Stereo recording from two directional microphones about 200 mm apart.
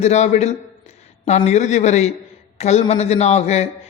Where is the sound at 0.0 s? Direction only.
35° left (ahead or behind).